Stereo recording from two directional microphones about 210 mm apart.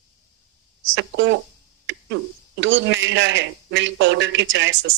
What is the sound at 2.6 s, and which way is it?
Speech, 60° right (ahead or behind).